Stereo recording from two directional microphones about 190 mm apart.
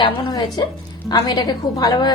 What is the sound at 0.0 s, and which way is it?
A woman's voice, 25° left (ahead or behind).